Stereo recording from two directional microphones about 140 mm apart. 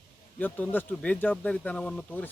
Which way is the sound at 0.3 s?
10° left (ahead or behind).